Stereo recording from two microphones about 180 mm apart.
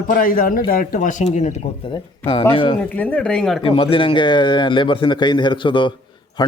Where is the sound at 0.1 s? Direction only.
50° left (ahead or behind).